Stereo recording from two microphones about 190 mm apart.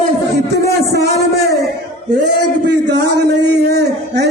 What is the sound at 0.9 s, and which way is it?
Speech, 60° right (ahead or behind).